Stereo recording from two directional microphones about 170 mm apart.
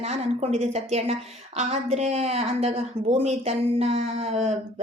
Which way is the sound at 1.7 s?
40° right (ahead or behind).